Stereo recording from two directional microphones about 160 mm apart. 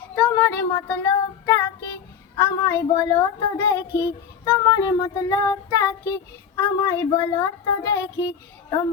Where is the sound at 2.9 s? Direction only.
20° left (ahead or behind).